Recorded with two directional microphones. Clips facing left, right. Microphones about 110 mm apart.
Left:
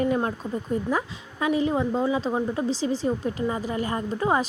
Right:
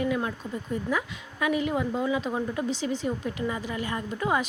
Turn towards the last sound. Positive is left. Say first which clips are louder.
# left 3 dB
turn(degrees=30)  # may be behind; listen again after turning